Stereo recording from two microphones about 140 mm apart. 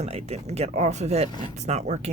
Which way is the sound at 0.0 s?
50° right (ahead or behind).